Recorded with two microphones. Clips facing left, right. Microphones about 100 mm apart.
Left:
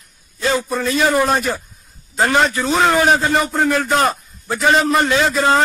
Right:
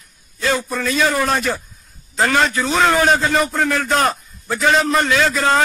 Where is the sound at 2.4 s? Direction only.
Centre (ahead or behind).